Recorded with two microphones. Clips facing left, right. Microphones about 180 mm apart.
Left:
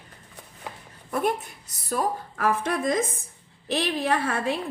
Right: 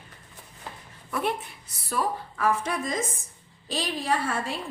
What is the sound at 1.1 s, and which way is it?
A woman's voice, 45° left (ahead or behind).